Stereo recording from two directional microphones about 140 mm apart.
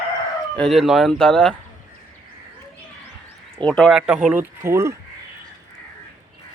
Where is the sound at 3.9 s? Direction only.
5° right (ahead or behind).